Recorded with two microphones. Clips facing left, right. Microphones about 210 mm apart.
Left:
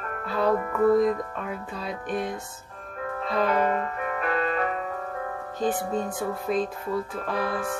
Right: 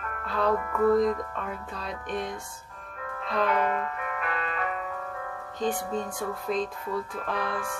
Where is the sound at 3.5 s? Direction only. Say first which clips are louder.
Left 2 dB; 35° left (ahead or behind).